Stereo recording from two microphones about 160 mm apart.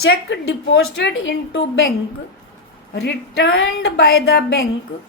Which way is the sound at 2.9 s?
90° left.